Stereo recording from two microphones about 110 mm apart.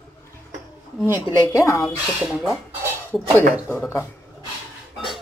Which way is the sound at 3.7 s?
20° left (ahead or behind).